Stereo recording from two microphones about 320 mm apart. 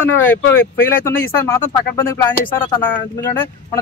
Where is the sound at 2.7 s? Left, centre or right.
Centre.